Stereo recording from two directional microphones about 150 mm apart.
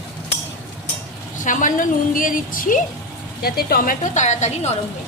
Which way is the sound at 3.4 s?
90° left.